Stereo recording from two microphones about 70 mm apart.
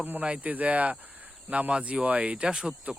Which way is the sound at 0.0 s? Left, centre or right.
Right.